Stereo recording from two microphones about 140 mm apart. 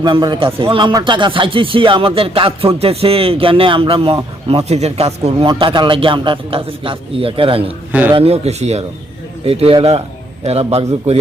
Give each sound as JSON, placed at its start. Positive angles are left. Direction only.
{"t": 0.0, "sound": "speech", "side_deg": -30}
{"t": 5.5, "sound": "a man's voice", "side_deg": -35}